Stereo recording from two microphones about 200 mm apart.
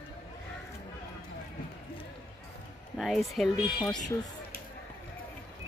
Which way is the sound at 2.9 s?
Centre (ahead or behind).